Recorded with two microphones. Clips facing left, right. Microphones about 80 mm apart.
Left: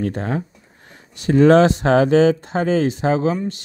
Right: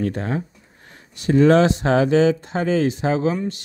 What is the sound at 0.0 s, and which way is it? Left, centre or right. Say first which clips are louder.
Speech: left 1 dB; left.